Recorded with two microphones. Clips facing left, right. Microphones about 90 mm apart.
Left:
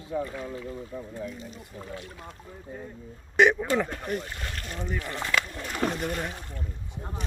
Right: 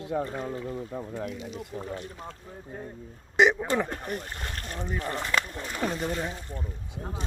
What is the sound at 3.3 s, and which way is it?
Speech, 20° right (ahead or behind).